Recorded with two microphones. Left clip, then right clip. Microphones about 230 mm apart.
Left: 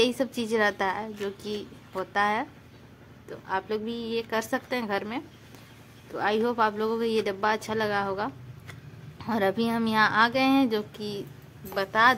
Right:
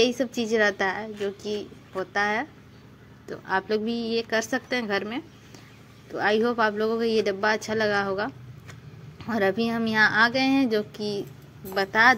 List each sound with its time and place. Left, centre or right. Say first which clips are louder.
0.0 s a woman's voice: right 2 dB; centre
3.3 s a woman's voice: right 4 dB; centre